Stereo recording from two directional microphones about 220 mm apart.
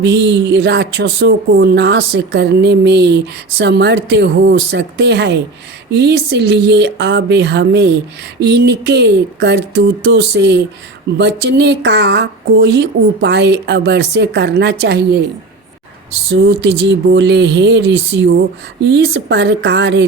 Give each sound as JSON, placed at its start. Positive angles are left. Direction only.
{"t": 0.0, "sound": "speech", "side_deg": -50}
{"t": 16.3, "sound": "speech", "side_deg": -50}